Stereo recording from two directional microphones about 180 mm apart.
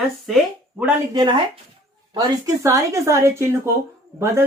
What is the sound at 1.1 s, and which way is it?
Speech, 25° right (ahead or behind).